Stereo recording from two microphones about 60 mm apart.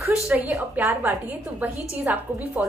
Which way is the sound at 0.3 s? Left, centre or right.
Centre.